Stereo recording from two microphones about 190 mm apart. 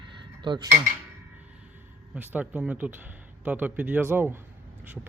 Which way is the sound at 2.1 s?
10° right (ahead or behind).